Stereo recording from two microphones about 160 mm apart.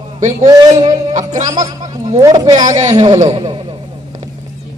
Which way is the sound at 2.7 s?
50° right (ahead or behind).